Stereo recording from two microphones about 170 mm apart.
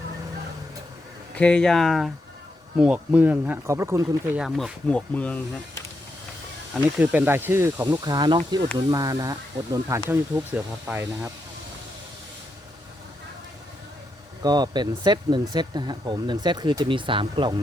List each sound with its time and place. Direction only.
1.4 s speech: 5° left (ahead or behind); by 4.2 s 15° right (ahead or behind)
4.4 s speech: 5° right (ahead or behind)
6.7 s speech: 10° right (ahead or behind)
8.0 s speech: 25° right (ahead or behind)
14.4 s speech: 25° right (ahead or behind)